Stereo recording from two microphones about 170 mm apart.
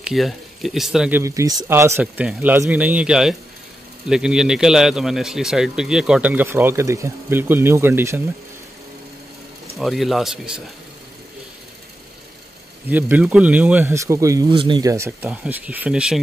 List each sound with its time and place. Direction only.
0.0 s speech: centre (ahead or behind)
1.2 s a man's voice: 20° right (ahead or behind)
9.8 s a man's voice: centre (ahead or behind)
12.9 s speech: 10° right (ahead or behind)
15.2 s speech: 10° right (ahead or behind)